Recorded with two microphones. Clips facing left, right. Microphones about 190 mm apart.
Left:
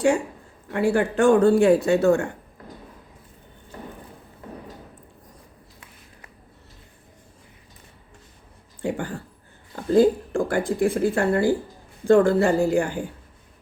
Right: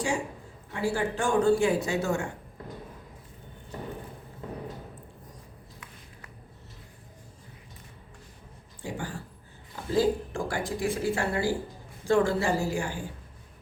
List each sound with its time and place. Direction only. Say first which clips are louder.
0.7 s speech: left 7 dB; 60° left (ahead or behind)
8.8 s speech: left 8 dB; 60° left (ahead or behind)